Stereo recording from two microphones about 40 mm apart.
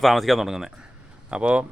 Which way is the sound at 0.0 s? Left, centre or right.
Centre.